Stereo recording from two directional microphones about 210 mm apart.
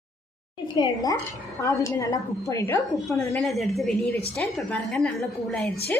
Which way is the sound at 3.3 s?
Centre (ahead or behind).